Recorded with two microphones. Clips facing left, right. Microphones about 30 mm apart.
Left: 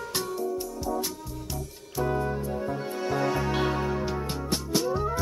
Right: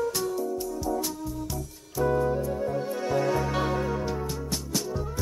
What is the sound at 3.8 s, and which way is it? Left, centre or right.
Music, centre.